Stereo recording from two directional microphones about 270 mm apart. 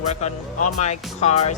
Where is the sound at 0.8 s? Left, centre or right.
Left.